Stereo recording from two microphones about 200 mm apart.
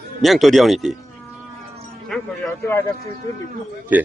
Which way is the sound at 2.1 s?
5° left (ahead or behind).